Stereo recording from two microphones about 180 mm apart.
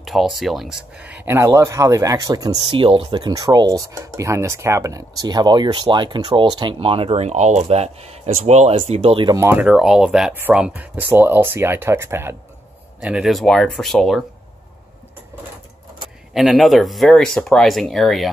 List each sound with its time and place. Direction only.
0.0 s speech: centre (ahead or behind); by 9.4 s 30° right (ahead or behind)
9.4 s speech: 10° right (ahead or behind)
16.3 s speech: centre (ahead or behind)